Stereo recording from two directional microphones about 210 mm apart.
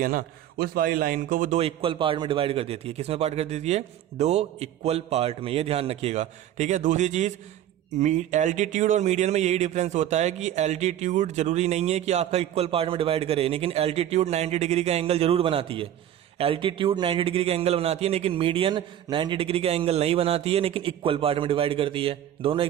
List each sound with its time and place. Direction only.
0.0 s a man's voice: 40° right (ahead or behind); by 22.6 s 25° right (ahead or behind)